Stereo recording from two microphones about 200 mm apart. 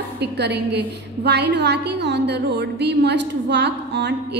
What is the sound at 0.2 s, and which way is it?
A woman's voice, 55° right (ahead or behind).